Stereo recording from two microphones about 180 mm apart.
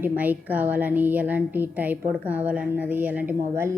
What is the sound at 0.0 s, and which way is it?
A woman's voice, 10° right (ahead or behind).